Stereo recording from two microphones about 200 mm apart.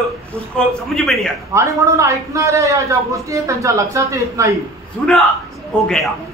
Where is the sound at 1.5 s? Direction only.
15° right (ahead or behind).